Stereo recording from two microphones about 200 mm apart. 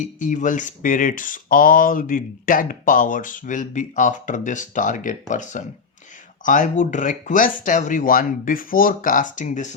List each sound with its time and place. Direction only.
0.0 s speech: 40° left (ahead or behind)